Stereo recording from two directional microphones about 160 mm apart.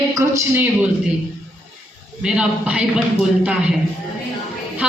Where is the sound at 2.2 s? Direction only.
5° right (ahead or behind).